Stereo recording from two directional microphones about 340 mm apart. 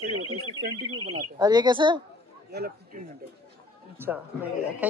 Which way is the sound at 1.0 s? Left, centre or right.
Centre.